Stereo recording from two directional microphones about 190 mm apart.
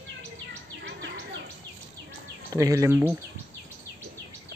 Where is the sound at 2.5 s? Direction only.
15° right (ahead or behind).